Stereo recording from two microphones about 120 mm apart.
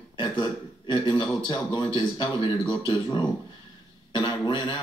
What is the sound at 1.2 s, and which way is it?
Speech, 35° left (ahead or behind).